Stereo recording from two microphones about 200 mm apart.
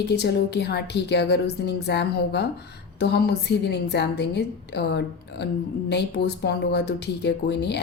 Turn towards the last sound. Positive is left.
turn(degrees=55)  # may be behind; listen again after turning